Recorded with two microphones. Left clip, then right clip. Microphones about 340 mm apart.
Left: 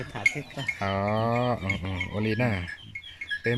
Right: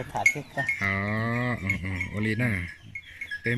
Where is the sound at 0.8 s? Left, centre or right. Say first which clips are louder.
Left 1 dB; centre.